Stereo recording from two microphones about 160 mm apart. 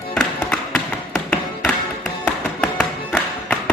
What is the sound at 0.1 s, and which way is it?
Music, 5° left (ahead or behind).